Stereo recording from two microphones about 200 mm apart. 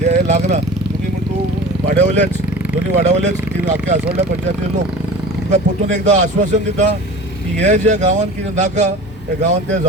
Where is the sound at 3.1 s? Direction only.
35° right (ahead or behind).